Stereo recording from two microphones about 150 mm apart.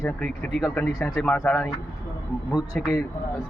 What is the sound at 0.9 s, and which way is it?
Speech, 20° left (ahead or behind).